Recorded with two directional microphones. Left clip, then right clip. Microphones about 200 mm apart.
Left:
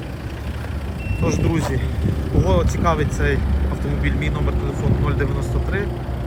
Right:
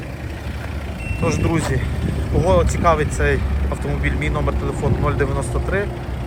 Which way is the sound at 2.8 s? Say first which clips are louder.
Right 3 dB; 5° left (ahead or behind).